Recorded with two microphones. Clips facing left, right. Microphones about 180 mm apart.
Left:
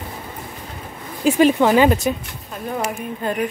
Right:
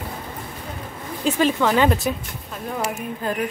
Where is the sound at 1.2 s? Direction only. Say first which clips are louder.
Left 5 dB; 20° left (ahead or behind).